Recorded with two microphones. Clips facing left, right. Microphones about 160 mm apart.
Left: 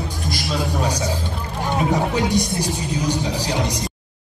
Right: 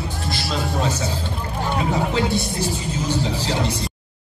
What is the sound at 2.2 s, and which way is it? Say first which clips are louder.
Speech: left 1 dB; 15° left (ahead or behind).